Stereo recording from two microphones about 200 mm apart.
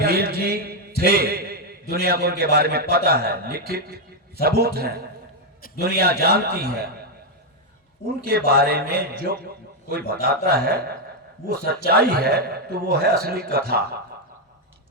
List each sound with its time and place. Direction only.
0.0 s a sound: 50° right (ahead or behind)
2.9 s a man's voice: 50° right (ahead or behind)
8.3 s a man's voice: 50° right (ahead or behind)